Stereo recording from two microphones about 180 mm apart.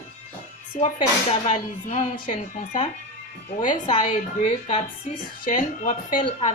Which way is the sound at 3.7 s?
25° left (ahead or behind).